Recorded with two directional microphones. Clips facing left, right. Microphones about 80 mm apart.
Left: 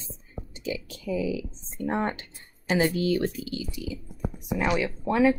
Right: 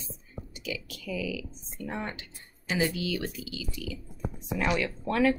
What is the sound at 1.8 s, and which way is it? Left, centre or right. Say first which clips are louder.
Speech: left 8 dB; left.